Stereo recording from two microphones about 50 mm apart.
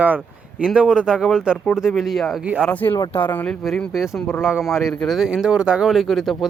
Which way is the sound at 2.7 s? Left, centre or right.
Left.